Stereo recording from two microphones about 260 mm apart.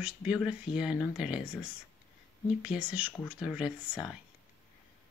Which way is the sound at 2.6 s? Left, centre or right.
Centre.